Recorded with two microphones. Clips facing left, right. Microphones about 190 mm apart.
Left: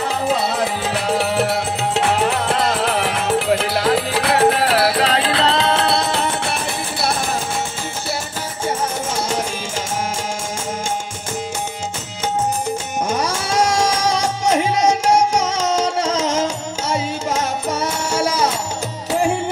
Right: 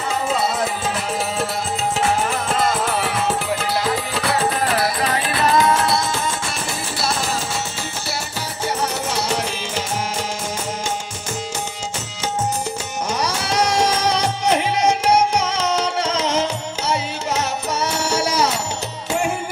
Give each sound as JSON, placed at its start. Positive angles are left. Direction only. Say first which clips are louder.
{"t": 1.0, "sound": "music", "louder": "left 5 dB", "side_deg": 65}
{"t": 13.1, "sound": "music", "louder": "left 1 dB", "side_deg": 50}